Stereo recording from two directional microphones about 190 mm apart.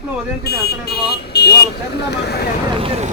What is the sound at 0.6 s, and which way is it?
Speech, 60° left (ahead or behind).